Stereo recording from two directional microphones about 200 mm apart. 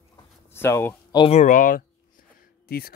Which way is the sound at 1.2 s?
35° left (ahead or behind).